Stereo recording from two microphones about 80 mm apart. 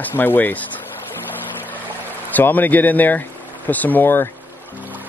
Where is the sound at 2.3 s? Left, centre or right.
Left.